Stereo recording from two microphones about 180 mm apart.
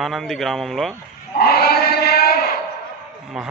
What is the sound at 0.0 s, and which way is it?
Speech, centre (ahead or behind).